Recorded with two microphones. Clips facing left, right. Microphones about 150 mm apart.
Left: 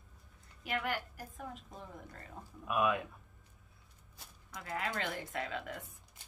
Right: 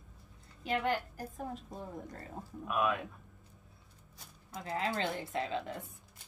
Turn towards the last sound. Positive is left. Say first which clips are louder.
# right 4 dB
turn(degrees=-25)  # may be behind; listen again after turning